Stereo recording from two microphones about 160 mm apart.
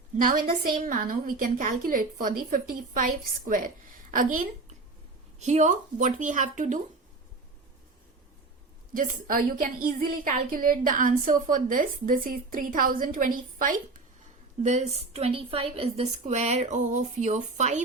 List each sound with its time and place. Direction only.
0.4 s a woman's voice: 50° right (ahead or behind)
5.4 s a woman's voice: 45° right (ahead or behind)
8.9 s a woman's voice: 55° right (ahead or behind)
14.6 s a woman's voice: 45° right (ahead or behind)